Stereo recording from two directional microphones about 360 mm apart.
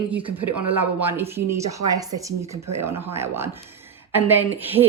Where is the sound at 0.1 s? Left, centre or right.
Centre.